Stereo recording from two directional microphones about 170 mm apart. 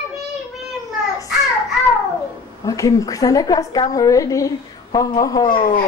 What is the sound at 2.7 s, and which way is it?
A woman's voice, 20° left (ahead or behind).